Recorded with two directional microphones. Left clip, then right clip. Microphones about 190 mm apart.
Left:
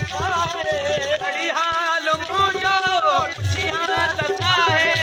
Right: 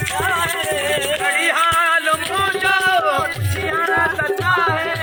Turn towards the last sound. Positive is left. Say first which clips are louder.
# even
turn(degrees=-5)  # may be behind; listen again after turning